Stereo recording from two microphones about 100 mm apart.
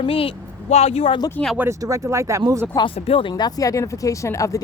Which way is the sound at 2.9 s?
70° left (ahead or behind).